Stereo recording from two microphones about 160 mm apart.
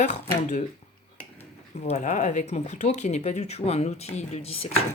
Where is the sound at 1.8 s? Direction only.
45° left (ahead or behind).